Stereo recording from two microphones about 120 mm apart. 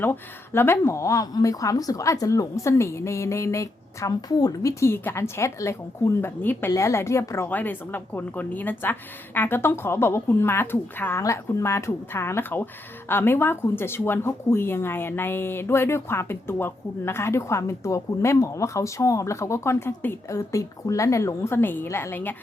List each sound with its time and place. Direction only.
0.0 s speech: 20° left (ahead or behind)